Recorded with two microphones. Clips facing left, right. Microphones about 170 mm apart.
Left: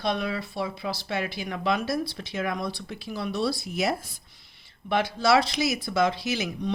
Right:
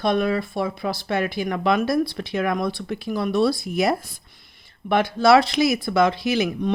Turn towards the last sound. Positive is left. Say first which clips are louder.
# right 7 dB
turn(degrees=-55)  # may be behind; listen again after turning